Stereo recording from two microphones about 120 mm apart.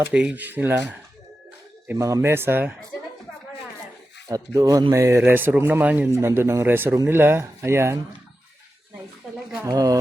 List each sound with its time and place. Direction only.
0.1 s speech: 10° right (ahead or behind)
1.9 s speech: 25° right (ahead or behind)
4.3 s speech: 30° right (ahead or behind)
9.6 s speech: 30° right (ahead or behind)